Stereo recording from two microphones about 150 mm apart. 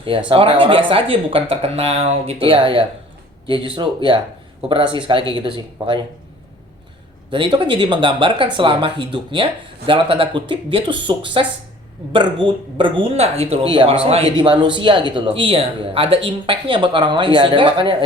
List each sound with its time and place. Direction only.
0.3 s speech: 35° right (ahead or behind)
7.3 s speech: 35° right (ahead or behind)